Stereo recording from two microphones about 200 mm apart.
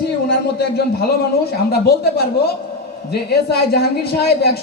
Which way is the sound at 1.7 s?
50° left (ahead or behind).